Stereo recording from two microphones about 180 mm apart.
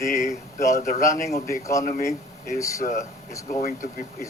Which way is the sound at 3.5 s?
45° left (ahead or behind).